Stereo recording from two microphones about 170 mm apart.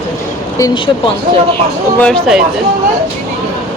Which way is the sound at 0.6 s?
30° left (ahead or behind).